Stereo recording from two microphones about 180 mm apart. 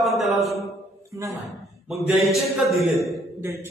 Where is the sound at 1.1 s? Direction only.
15° right (ahead or behind).